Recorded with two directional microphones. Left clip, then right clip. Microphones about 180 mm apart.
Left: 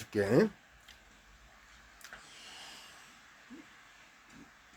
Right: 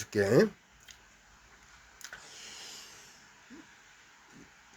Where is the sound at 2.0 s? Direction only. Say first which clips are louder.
Right 4 dB; 15° right (ahead or behind).